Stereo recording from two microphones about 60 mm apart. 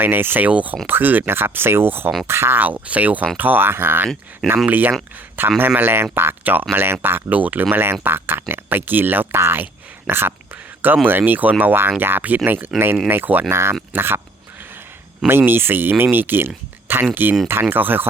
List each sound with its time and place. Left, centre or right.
0.0 s speech: right
2.6 s speech: right
10.1 s whispering: right
11.3 s speech: right
13.5 s speech: right
14.6 s a sound: right
15.3 s speech: right